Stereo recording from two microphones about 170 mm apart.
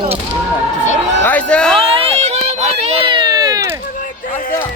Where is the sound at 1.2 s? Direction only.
10° left (ahead or behind).